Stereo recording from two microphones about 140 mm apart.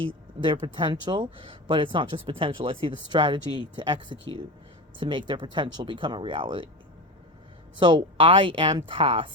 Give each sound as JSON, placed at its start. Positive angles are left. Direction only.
{"t": 0.3, "sound": "speech", "side_deg": -35}
{"t": 7.8, "sound": "speech", "side_deg": -35}